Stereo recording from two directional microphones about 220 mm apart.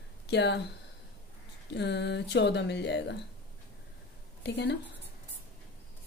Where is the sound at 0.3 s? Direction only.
50° left (ahead or behind).